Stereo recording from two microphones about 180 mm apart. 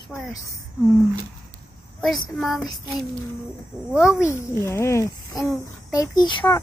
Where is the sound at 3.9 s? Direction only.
5° right (ahead or behind).